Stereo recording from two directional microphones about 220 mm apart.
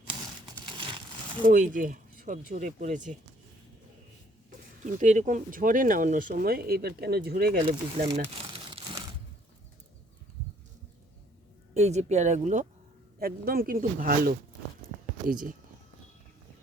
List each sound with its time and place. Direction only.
0.6 s crumpling: 20° right (ahead or behind)
1.5 s speech: 35° right (ahead or behind)
4.8 s speech: 35° right (ahead or behind)
7.7 s speech: 30° right (ahead or behind)
11.7 s speech: 30° right (ahead or behind)
13.1 s speech: 45° right (ahead or behind)